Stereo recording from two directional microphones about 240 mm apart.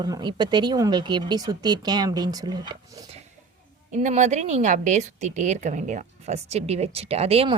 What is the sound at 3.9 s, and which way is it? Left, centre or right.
Speech, right.